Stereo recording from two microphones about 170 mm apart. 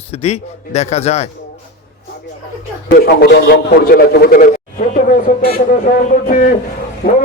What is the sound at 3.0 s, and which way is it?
A man's voice, 65° left (ahead or behind).